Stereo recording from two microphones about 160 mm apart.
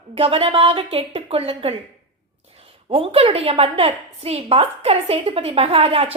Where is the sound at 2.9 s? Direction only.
35° right (ahead or behind).